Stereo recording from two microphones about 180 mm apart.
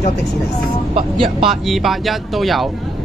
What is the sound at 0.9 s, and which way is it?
Speech, 30° right (ahead or behind).